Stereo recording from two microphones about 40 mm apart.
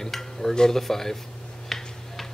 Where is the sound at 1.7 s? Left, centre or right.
Centre.